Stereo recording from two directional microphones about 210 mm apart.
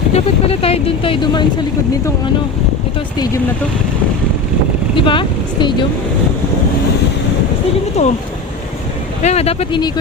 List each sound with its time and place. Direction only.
0.1 s speech: 30° left (ahead or behind)
4.9 s speech: 25° left (ahead or behind)
8.0 s speech: 30° left (ahead or behind)
9.2 s speech: 30° left (ahead or behind)